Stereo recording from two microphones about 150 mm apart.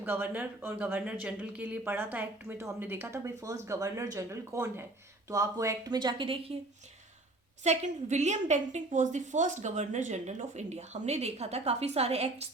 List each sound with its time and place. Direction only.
0.0 s speech: 15° right (ahead or behind); by 6.6 s 40° right (ahead or behind)
7.6 s a woman's voice: 50° right (ahead or behind)